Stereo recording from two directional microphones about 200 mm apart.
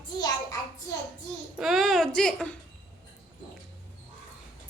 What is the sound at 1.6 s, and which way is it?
Speech, centre (ahead or behind).